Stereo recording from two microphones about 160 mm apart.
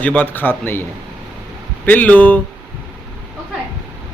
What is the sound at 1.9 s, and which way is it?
Speech, 10° left (ahead or behind).